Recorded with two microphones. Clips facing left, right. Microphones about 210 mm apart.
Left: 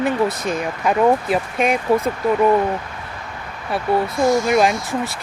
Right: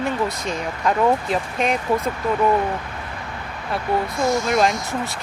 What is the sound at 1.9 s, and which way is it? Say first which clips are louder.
Speech: left 6 dB; 10° left (ahead or behind).